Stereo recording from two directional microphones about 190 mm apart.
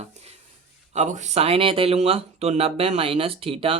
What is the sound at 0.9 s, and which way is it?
Speech, 40° right (ahead or behind).